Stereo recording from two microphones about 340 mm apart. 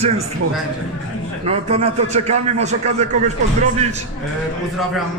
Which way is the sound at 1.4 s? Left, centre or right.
Centre.